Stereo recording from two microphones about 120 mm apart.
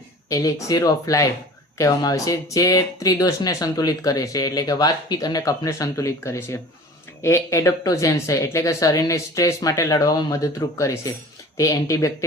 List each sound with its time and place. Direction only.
0.3 s speech: 30° left (ahead or behind)